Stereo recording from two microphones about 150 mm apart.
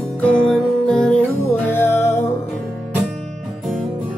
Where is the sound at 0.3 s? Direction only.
5° left (ahead or behind).